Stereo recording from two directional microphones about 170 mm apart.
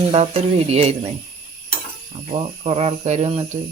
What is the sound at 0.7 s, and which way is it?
Speech, 35° right (ahead or behind).